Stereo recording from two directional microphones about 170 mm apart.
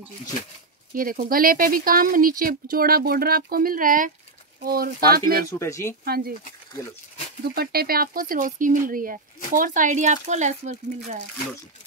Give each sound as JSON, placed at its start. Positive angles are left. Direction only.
{"t": 0.9, "sound": "speech", "side_deg": -55}
{"t": 5.4, "sound": "speech", "side_deg": 20}
{"t": 6.0, "sound": "speech", "side_deg": -65}
{"t": 7.5, "sound": "speech", "side_deg": -65}